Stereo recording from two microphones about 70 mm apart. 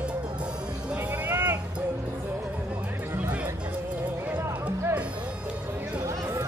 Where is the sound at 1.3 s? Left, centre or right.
Right.